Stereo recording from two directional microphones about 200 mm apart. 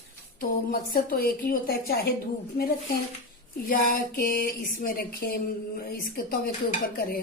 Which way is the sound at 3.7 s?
45° left (ahead or behind).